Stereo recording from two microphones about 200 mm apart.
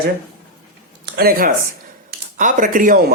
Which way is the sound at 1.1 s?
50° right (ahead or behind).